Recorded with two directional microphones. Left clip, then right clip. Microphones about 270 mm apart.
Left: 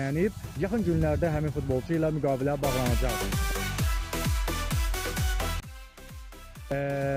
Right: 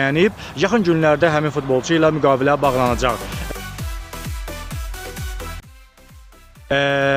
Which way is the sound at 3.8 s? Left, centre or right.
Centre.